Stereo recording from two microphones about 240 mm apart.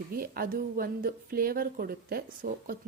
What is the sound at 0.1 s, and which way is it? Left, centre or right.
Speech, right.